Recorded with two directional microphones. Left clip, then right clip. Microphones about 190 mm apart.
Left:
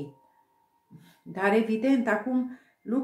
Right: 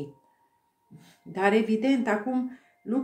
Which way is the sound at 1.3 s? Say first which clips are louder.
Right 1 dB; 30° right (ahead or behind).